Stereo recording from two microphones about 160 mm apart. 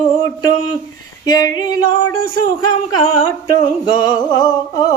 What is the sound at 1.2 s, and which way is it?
Mantra, 20° left (ahead or behind).